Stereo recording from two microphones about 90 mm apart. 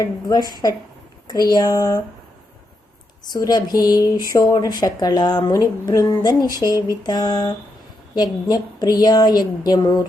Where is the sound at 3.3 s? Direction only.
50° left (ahead or behind).